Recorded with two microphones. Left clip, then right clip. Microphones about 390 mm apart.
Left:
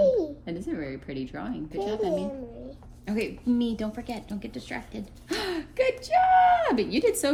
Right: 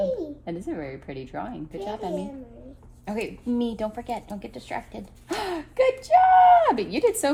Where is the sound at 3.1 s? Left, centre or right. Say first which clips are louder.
Left 1 dB; centre.